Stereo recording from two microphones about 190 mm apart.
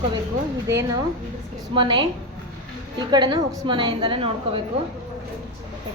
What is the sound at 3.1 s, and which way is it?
A woman's voice, 25° right (ahead or behind).